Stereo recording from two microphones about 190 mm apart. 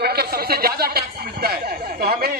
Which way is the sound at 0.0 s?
55° right (ahead or behind).